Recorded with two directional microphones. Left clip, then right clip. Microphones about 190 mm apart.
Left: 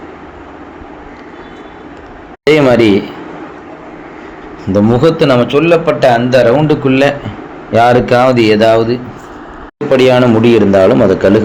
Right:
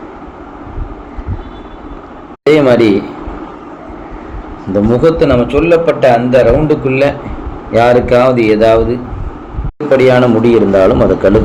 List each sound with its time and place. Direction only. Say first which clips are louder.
2.5 s a man's voice: even; 30° left (ahead or behind)
4.7 s a man's voice: even; 30° left (ahead or behind)
7.7 s a man's voice: even; 20° left (ahead or behind)